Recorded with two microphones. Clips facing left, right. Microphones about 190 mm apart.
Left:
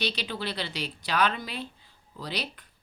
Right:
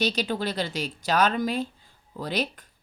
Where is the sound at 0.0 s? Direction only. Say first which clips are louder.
Right 6 dB; 45° right (ahead or behind).